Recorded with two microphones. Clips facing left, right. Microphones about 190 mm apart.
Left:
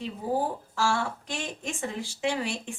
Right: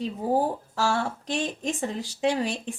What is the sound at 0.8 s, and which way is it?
Speech, 40° right (ahead or behind).